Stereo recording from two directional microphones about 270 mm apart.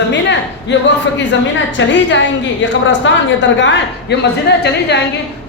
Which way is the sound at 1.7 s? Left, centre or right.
Left.